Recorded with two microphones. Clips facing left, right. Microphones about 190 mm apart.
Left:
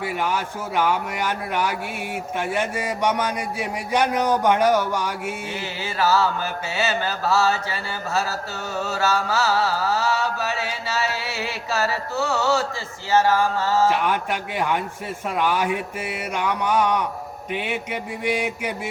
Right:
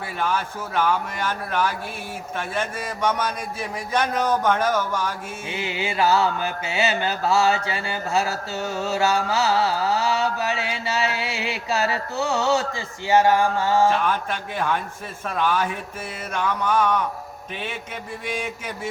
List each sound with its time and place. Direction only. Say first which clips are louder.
0.2 s a man's voice: even; 15° left (ahead or behind)
5.6 s mantra: right 2 dB; 15° right (ahead or behind)
13.9 s a man's voice: left 1 dB; 15° left (ahead or behind)